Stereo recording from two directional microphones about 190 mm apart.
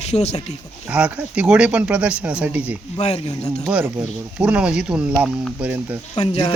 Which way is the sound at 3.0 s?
35° left (ahead or behind).